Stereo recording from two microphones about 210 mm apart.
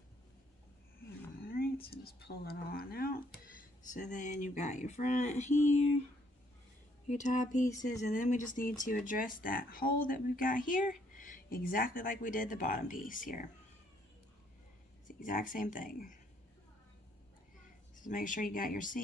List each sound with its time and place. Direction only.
1.4 s speech: 45° left (ahead or behind)
7.1 s speech: 35° left (ahead or behind)
15.0 s speech: 40° left (ahead or behind)
17.9 s speech: 40° left (ahead or behind)